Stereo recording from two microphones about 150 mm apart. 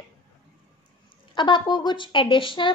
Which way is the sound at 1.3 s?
30° left (ahead or behind).